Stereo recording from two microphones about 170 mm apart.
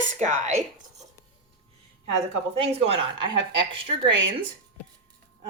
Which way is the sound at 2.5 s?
35° right (ahead or behind).